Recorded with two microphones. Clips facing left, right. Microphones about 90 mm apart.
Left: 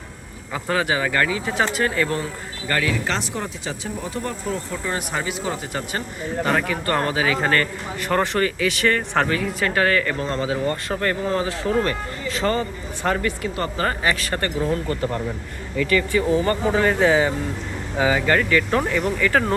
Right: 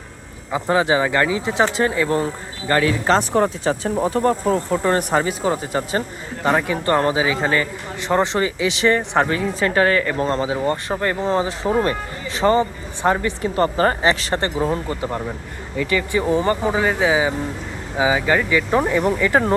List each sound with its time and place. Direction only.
0.5 s speech: 25° right (ahead or behind)
3.3 s speech: 50° right (ahead or behind); by 7.3 s 20° right (ahead or behind)
7.3 s speech: 10° right (ahead or behind)
8.0 s speech: 20° right (ahead or behind)
10.2 s speech: 35° right (ahead or behind)
10.4 s speech: 20° right (ahead or behind)
13.4 s speech: 35° right (ahead or behind)
16.5 s speech: 10° right (ahead or behind)